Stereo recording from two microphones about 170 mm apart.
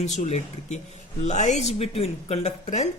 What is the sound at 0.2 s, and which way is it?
Speech, 40° left (ahead or behind).